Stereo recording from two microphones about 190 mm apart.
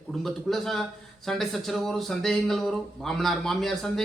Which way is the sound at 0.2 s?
Centre (ahead or behind).